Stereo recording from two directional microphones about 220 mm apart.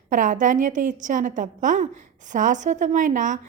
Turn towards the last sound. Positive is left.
turn(degrees=-35)  # may be behind; listen again after turning